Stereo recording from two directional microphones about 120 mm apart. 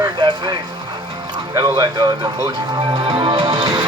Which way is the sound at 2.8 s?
45° right (ahead or behind).